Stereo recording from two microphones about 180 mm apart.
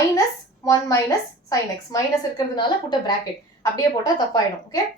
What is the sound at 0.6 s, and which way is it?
Speech, 20° left (ahead or behind).